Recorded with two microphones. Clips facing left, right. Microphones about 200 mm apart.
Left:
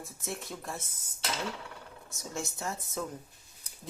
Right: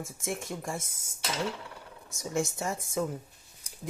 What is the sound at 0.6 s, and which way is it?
Speech, 10° right (ahead or behind).